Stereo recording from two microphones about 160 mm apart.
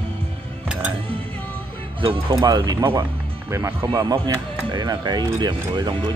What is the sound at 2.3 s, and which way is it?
Speech, 25° right (ahead or behind).